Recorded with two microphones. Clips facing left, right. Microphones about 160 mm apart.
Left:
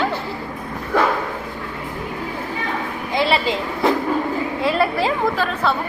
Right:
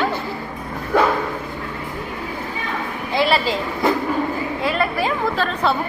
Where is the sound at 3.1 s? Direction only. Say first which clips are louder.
Right 1 dB; 20° left (ahead or behind).